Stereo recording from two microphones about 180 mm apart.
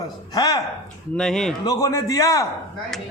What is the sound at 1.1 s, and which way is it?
Speech, 5° left (ahead or behind).